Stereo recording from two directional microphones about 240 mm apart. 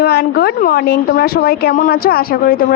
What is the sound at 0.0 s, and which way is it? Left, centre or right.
A woman's voice, left.